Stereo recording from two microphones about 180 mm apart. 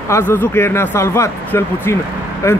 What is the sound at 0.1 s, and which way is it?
Speech, 15° left (ahead or behind).